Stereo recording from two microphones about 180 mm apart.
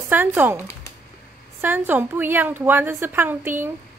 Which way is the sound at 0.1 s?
10° right (ahead or behind).